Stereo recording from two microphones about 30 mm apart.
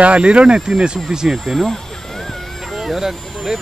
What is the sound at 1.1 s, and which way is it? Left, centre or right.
Speech, centre.